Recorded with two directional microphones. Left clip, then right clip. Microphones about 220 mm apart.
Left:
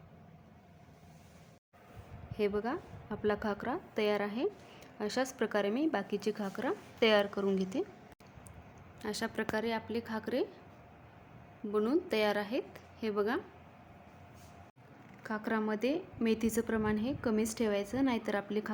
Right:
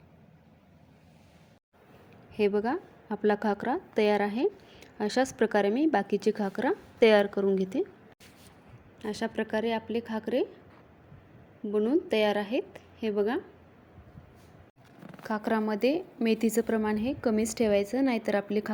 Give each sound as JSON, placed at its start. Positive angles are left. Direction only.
{"t": 2.3, "sound": "a woman's voice", "side_deg": -20}
{"t": 9.0, "sound": "a woman's voice", "side_deg": -15}
{"t": 11.7, "sound": "a woman's voice", "side_deg": -15}
{"t": 15.2, "sound": "a woman's voice", "side_deg": -20}